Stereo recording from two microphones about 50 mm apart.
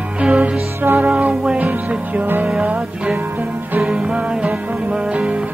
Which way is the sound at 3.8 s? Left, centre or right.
Centre.